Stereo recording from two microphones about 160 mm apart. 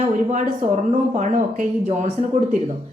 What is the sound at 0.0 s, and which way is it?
A woman's voice, 45° right (ahead or behind).